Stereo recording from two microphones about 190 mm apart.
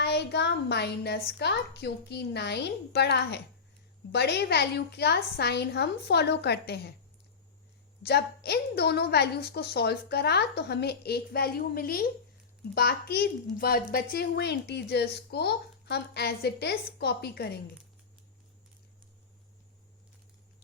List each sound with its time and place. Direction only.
0.0 s a child's voice: 60° left (ahead or behind)
8.0 s a child's voice: 60° left (ahead or behind)